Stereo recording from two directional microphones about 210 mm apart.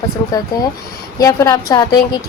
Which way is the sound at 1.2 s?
15° left (ahead or behind).